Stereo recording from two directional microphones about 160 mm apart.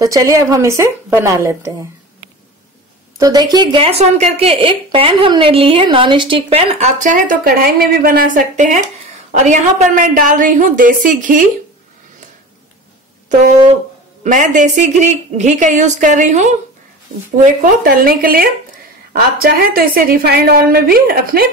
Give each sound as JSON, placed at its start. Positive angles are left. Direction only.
{"t": 0.0, "sound": "speech", "side_deg": -20}
{"t": 3.2, "sound": "a woman's voice", "side_deg": -25}
{"t": 14.2, "sound": "a woman's voice", "side_deg": -50}
{"t": 17.5, "sound": "a woman's voice", "side_deg": -60}